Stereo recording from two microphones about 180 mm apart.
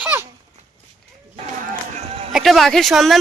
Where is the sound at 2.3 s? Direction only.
Centre (ahead or behind).